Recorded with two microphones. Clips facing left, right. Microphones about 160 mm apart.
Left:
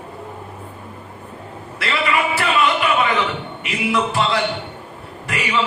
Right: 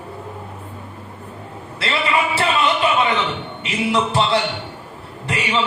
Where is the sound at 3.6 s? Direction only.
25° right (ahead or behind).